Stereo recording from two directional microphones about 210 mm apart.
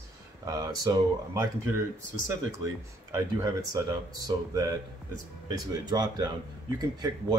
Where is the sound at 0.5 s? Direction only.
15° right (ahead or behind).